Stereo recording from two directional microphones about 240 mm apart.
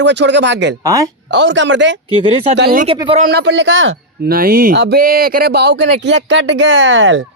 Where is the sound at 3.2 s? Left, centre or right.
Right.